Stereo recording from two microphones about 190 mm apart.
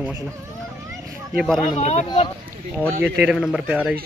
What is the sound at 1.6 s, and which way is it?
Speech, 40° left (ahead or behind).